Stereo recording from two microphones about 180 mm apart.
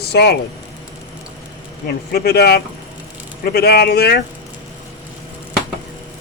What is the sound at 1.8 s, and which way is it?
Speech, 60° left (ahead or behind).